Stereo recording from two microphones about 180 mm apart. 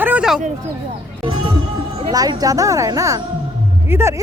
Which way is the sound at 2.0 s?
20° right (ahead or behind).